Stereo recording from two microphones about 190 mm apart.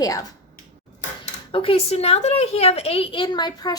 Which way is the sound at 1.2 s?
30° left (ahead or behind).